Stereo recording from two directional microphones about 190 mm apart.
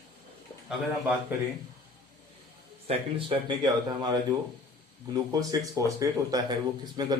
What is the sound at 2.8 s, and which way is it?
Speech, 30° right (ahead or behind).